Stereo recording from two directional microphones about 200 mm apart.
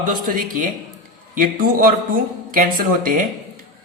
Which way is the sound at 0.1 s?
45° right (ahead or behind).